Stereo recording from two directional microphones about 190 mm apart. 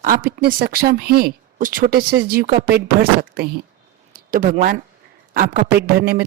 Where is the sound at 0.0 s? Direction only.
50° right (ahead or behind).